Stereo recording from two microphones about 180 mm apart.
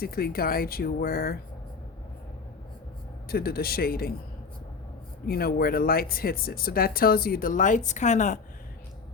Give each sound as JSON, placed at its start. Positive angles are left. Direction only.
{"t": 0.0, "sound": "speech", "side_deg": 55}
{"t": 3.2, "sound": "speech", "side_deg": 55}
{"t": 5.2, "sound": "speech", "side_deg": 60}